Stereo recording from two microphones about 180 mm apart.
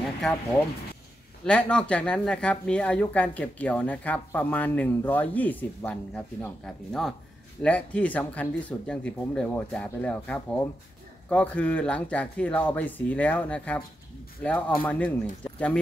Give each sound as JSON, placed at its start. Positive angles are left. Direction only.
{"t": 0.2, "sound": "speech", "side_deg": 5}
{"t": 1.4, "sound": "speech", "side_deg": 5}